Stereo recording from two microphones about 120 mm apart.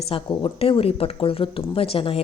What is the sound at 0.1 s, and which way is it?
Speech, 45° left (ahead or behind).